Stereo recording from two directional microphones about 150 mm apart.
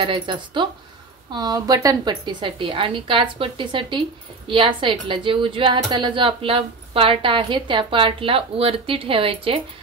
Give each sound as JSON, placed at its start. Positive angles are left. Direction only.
{"t": 0.0, "sound": "a woman's voice", "side_deg": -35}